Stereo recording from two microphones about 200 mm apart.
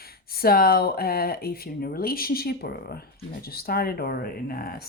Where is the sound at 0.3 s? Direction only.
50° left (ahead or behind).